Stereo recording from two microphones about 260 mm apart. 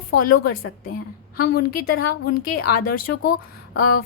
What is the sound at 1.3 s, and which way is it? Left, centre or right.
A woman's voice, left.